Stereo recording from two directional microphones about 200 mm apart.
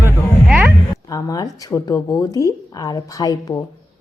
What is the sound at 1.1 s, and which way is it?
A woman's voice, 15° left (ahead or behind).